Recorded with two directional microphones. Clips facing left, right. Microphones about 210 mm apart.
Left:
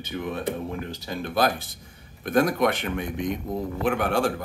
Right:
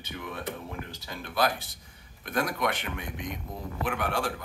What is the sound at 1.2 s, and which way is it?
Speech, 45° left (ahead or behind).